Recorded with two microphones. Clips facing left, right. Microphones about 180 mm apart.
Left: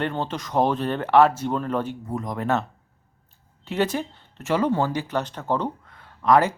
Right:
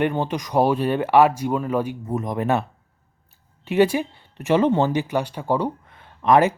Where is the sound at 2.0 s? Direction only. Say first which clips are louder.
Right 3 dB; 20° right (ahead or behind).